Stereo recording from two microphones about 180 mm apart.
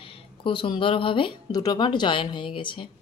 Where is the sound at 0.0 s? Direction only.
30° left (ahead or behind).